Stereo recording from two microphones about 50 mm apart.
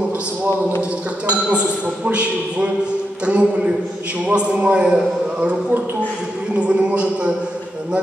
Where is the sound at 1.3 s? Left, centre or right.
Right.